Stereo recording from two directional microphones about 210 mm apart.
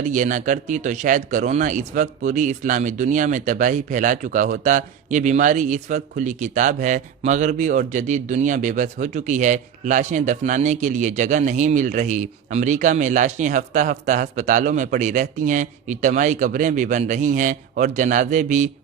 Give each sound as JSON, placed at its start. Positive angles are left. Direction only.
{"t": 0.1, "sound": "speech", "side_deg": -35}